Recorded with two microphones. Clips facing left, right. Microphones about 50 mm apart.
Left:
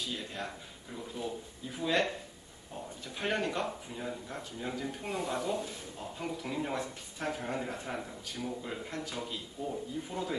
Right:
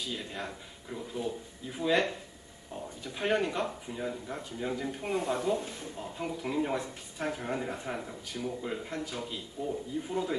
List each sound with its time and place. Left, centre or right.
0.1 s speech: centre
1.8 s a man's voice: centre
3.2 s a man's voice: centre